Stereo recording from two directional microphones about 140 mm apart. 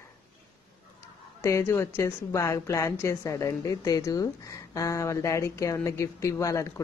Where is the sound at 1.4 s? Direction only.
20° left (ahead or behind).